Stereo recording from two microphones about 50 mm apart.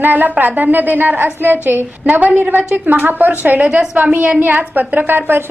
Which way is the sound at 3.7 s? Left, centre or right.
Right.